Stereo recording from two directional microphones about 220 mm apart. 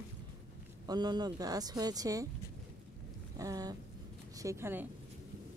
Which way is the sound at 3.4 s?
15° right (ahead or behind).